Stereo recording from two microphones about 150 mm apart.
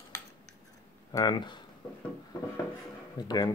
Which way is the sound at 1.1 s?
25° left (ahead or behind).